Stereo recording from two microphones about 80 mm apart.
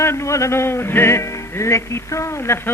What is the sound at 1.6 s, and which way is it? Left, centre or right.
Speech, left.